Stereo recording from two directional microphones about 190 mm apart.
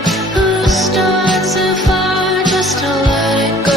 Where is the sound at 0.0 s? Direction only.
Centre (ahead or behind).